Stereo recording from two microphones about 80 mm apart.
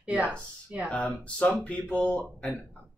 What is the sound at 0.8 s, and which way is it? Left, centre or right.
Speech, centre.